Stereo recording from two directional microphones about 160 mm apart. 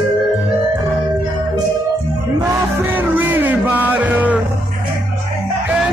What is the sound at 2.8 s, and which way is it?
Music, 10° right (ahead or behind).